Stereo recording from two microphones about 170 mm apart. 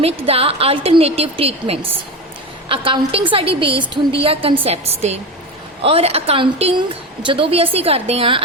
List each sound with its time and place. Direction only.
0.0 s a woman's voice: 35° right (ahead or behind)